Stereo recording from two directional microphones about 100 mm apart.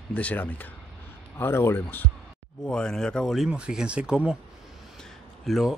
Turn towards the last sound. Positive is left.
turn(degrees=0)  # may be behind; listen again after turning